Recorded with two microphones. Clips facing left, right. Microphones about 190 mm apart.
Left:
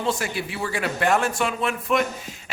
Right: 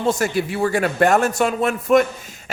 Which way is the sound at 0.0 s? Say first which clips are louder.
Right 6 dB; 45° right (ahead or behind).